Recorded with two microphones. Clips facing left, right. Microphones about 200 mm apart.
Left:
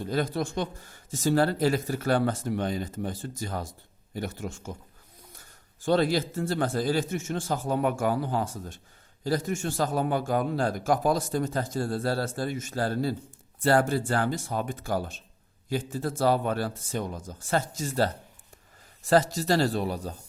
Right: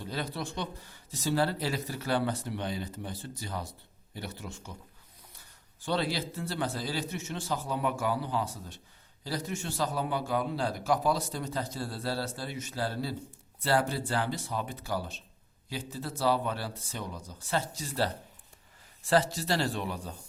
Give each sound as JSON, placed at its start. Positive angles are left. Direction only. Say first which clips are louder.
{"t": 0.0, "sound": "a man's voice", "louder": "left 8 dB", "side_deg": 45}